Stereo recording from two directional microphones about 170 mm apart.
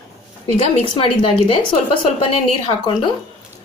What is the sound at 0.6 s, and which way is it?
Speech, 30° left (ahead or behind).